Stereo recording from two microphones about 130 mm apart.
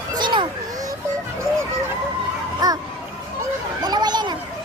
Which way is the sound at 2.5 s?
30° right (ahead or behind).